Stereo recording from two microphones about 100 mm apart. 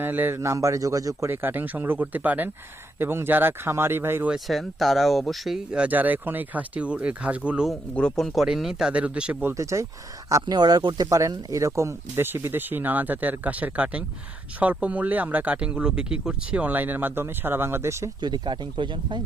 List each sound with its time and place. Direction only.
0.0 s a man's voice: 20° right (ahead or behind)
1.3 s speech: 20° right (ahead or behind)
4.3 s speech: centre (ahead or behind)
7.9 s speech: 5° left (ahead or behind); by 9.6 s 15° right (ahead or behind)
9.6 s speech: 30° right (ahead or behind)
10.4 s speech: 45° right (ahead or behind); by 18.1 s 30° right (ahead or behind)
18.2 s speech: 50° right (ahead or behind)